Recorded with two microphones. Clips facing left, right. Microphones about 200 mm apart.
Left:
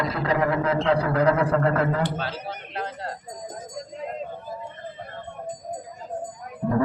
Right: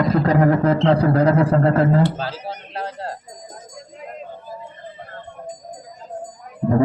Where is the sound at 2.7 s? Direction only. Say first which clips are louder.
Right 3 dB; 35° right (ahead or behind).